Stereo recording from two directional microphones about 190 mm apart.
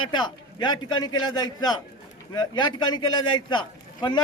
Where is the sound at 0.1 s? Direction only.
25° left (ahead or behind).